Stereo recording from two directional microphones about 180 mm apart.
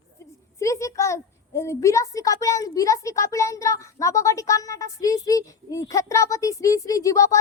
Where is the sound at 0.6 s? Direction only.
15° left (ahead or behind).